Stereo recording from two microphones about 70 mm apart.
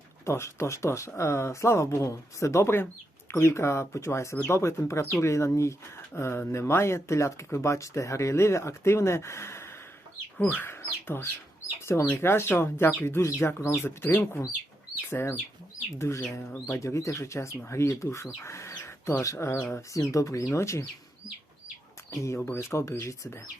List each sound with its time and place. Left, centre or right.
0.3 s speech: left
10.4 s speech: left
10.7 s speech: left
14.1 s speech: left
15.1 s speech: left
18.8 s bird: left
19.2 s speech: left
22.1 s speech: left